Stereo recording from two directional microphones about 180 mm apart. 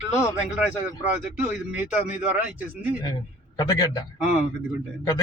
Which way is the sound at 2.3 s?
10° right (ahead or behind).